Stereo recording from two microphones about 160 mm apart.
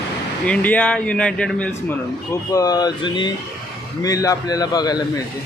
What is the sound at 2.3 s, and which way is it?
Speech, 20° left (ahead or behind).